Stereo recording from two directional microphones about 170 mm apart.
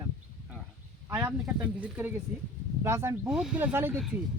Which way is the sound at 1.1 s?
15° right (ahead or behind).